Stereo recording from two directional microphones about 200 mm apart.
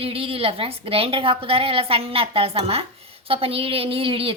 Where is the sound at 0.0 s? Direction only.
30° right (ahead or behind).